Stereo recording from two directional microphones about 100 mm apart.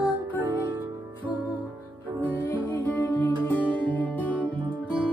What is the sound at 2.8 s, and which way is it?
Music, 25° left (ahead or behind).